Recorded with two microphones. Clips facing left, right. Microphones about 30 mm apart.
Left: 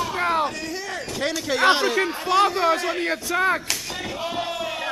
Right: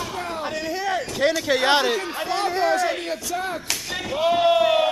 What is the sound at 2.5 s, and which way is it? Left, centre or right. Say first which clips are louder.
Speech: even; centre.